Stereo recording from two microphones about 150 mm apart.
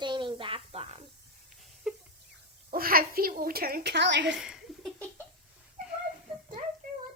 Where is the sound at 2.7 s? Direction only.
75° right (ahead or behind).